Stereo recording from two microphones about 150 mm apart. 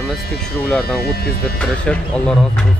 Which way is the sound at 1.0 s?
90° left.